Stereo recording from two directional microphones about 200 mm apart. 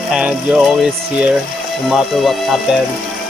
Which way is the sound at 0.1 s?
Centre (ahead or behind).